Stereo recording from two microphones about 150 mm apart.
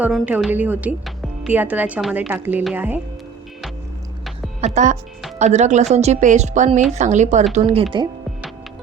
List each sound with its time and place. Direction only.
0.0 s a woman's voice: 10° right (ahead or behind)
4.6 s a woman's voice: 55° right (ahead or behind)
7.5 s speech: 40° right (ahead or behind)